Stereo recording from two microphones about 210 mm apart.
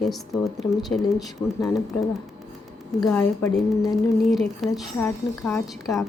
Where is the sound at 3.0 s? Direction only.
10° left (ahead or behind).